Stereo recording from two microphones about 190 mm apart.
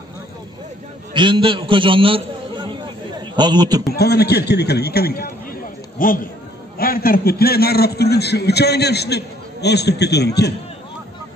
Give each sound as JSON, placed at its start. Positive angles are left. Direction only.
{"t": 1.1, "sound": "a man's voice", "side_deg": -25}
{"t": 3.9, "sound": "a man's voice", "side_deg": 55}